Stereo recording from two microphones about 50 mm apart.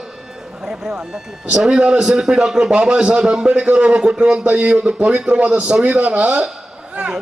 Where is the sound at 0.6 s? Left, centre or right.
Centre.